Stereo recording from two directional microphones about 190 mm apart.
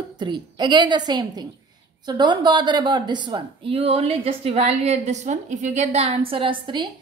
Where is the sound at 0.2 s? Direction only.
25° right (ahead or behind).